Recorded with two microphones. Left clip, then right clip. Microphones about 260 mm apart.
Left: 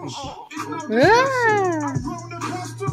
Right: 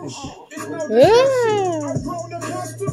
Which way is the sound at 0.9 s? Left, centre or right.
Left.